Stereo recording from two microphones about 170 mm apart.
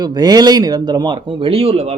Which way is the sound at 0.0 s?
25° right (ahead or behind).